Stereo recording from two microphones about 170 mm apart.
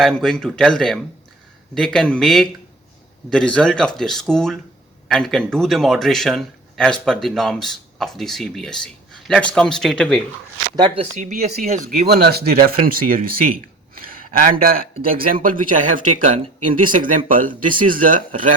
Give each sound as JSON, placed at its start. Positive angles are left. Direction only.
{"t": 0.0, "sound": "speech", "side_deg": 0}
{"t": 10.8, "sound": "speech", "side_deg": -30}
{"t": 11.2, "sound": "speech", "side_deg": -50}